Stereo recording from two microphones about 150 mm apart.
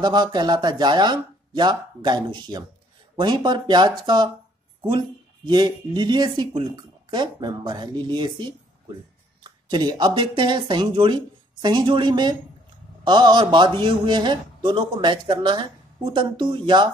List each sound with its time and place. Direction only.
0.0 s speech: 30° right (ahead or behind)
5.5 s speech: 30° right (ahead or behind)